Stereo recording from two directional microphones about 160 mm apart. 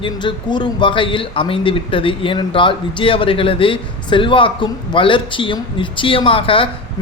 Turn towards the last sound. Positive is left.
turn(degrees=35)  # may be behind; listen again after turning